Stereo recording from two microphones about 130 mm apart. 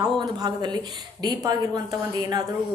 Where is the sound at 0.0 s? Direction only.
30° right (ahead or behind).